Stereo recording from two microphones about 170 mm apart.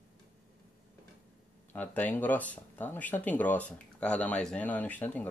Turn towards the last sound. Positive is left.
turn(degrees=10)  # may be behind; listen again after turning